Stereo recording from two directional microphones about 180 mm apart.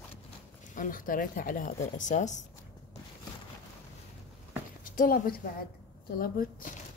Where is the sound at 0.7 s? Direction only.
50° left (ahead or behind).